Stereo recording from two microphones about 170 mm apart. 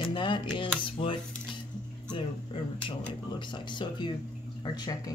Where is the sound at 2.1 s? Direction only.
30° left (ahead or behind).